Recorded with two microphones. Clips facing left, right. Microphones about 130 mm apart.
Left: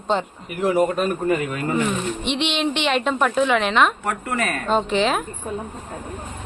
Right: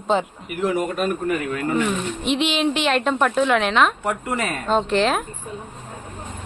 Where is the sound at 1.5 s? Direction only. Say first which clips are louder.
Right 1 dB; 20° left (ahead or behind).